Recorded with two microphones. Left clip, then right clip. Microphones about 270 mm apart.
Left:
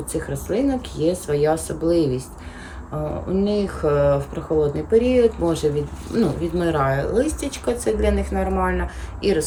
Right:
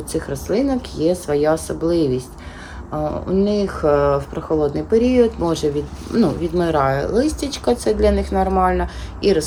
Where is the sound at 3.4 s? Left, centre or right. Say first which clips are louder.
Right 3 dB; centre.